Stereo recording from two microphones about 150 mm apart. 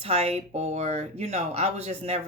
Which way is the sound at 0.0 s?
45° right (ahead or behind).